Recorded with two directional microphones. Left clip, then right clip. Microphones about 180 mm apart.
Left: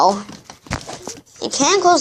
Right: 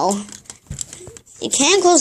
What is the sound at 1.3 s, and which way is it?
Speech, 60° right (ahead or behind).